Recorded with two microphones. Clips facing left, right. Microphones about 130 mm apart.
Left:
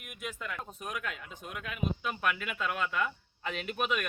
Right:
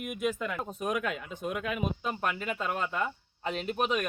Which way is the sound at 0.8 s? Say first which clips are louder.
Right 9 dB; 70° right (ahead or behind).